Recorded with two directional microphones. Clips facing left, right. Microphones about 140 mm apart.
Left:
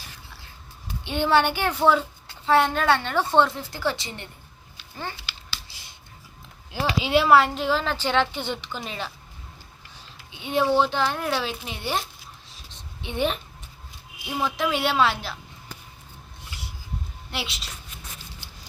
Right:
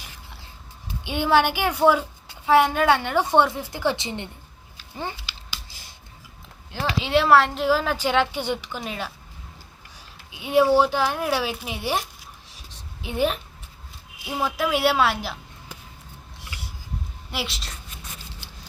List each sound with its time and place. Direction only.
1.0 s a woman's voice: 10° right (ahead or behind)
4.9 s a sound: 15° right (ahead or behind)
7.0 s a woman's voice: 5° left (ahead or behind)
10.3 s a woman's voice: 10° right (ahead or behind)
17.3 s a woman's voice: centre (ahead or behind)